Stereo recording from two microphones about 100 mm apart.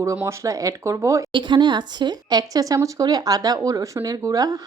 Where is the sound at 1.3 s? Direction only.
50° right (ahead or behind).